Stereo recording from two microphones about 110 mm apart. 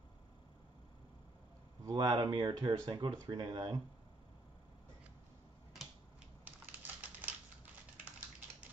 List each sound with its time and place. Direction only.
1.9 s speech: 40° right (ahead or behind)
6.4 s typing: 15° right (ahead or behind)